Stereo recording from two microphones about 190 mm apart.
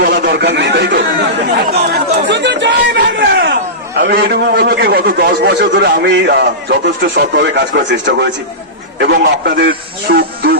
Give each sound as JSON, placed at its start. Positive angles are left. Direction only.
{"t": 0.0, "sound": "a sound", "side_deg": -60}
{"t": 1.9, "sound": "chatter", "side_deg": -65}
{"t": 3.9, "sound": "a man's voice", "side_deg": -60}